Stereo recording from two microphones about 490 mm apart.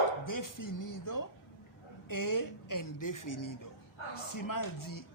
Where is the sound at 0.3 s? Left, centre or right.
Left.